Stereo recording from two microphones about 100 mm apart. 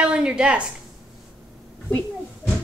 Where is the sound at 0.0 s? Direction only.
10° right (ahead or behind).